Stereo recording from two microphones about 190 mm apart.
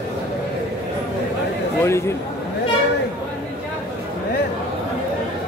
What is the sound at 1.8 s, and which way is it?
Speech, 15° left (ahead or behind).